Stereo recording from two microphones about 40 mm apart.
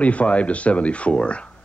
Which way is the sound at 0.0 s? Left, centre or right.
Left.